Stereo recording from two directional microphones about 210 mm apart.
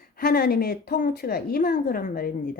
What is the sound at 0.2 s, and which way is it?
A woman's voice, 45° left (ahead or behind).